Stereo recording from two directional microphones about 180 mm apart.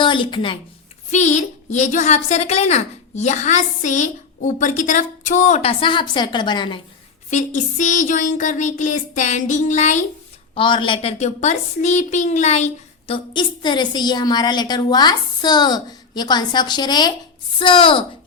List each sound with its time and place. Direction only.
0.0 s speech: 25° left (ahead or behind)
1.1 s a woman's voice: 40° left (ahead or behind)
7.3 s speech: 40° left (ahead or behind)
10.5 s a woman's voice: 30° left (ahead or behind)